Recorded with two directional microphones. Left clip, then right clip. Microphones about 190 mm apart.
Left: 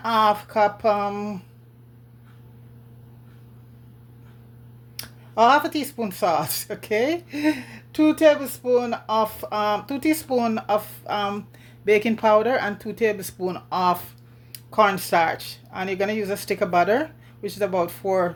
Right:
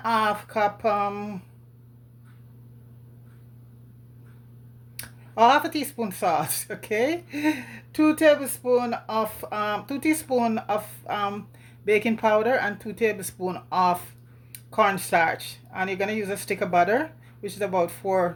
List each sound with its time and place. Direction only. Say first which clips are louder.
0.0 s speech: left 4 dB; 15° left (ahead or behind)
4.9 s speech: left 1 dB; 15° left (ahead or behind)